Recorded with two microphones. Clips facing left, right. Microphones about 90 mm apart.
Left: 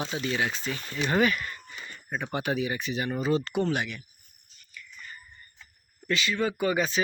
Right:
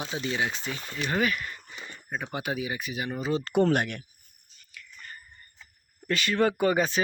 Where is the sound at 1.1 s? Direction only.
Centre (ahead or behind).